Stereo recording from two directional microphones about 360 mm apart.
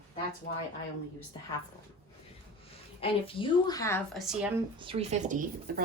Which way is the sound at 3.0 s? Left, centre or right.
Centre.